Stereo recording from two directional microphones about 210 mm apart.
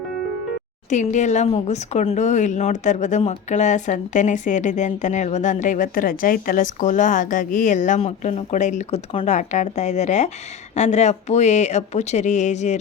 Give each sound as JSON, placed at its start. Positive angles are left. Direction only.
{"t": 0.9, "sound": "speech", "side_deg": 35}